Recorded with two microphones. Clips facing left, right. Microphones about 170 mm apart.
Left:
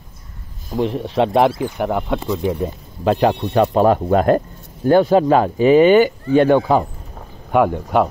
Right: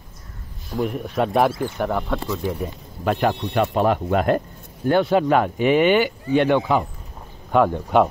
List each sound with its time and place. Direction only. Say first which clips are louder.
0.7 s speech: left 4 dB; 30° left (ahead or behind)
3.1 s speech: left 5 dB; 35° left (ahead or behind)
7.5 s speech: left 2 dB; 10° left (ahead or behind)